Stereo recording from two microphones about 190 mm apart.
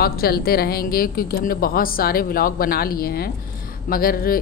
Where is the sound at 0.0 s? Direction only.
55° left (ahead or behind).